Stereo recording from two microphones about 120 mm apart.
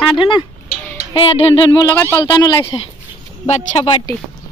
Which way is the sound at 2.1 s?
35° left (ahead or behind).